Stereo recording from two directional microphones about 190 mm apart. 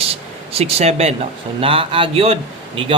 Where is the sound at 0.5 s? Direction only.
35° right (ahead or behind).